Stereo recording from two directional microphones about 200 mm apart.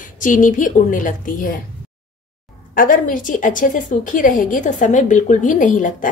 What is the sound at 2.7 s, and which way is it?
Speech, 45° left (ahead or behind).